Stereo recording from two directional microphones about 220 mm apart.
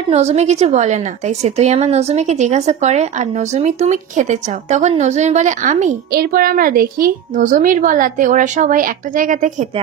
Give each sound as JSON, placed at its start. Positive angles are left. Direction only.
{"t": 0.1, "sound": "a woman's voice", "side_deg": -30}